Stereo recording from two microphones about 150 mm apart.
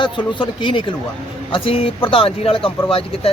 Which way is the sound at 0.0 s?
30° left (ahead or behind).